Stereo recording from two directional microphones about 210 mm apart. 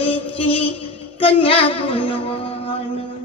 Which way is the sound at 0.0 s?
25° left (ahead or behind).